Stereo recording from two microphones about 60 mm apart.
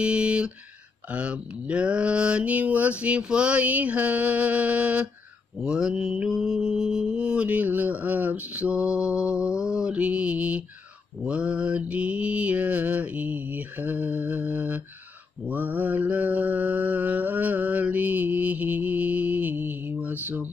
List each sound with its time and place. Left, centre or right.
0.0 s speech: centre
1.1 s mantra: centre
5.6 s mantra: centre; by 20.4 s right